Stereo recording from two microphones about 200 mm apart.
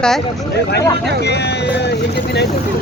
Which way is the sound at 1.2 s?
55° left (ahead or behind).